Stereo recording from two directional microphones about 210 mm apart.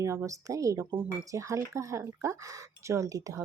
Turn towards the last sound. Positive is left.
turn(degrees=-15)  # may be behind; listen again after turning